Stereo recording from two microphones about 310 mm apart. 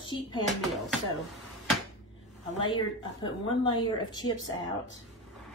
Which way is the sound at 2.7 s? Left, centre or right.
Centre.